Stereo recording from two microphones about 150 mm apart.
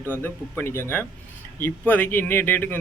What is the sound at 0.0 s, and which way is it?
Speech, 15° left (ahead or behind).